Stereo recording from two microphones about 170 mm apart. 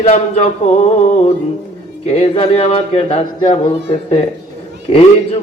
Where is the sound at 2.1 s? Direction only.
35° left (ahead or behind).